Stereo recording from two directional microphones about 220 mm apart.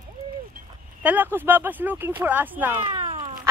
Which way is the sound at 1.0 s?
10° right (ahead or behind).